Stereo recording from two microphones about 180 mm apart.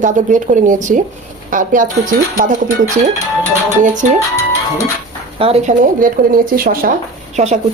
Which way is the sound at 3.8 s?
45° right (ahead or behind).